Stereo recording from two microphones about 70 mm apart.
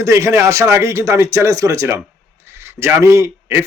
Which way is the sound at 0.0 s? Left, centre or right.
Right.